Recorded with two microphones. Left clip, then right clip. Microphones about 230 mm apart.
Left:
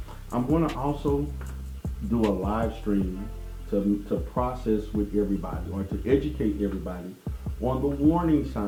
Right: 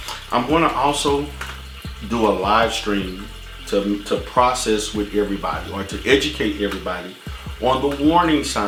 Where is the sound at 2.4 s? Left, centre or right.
Centre.